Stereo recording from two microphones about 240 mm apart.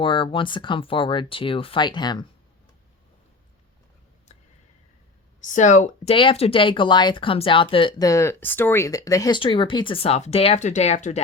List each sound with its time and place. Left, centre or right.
0.0 s speech: left
5.4 s speech: left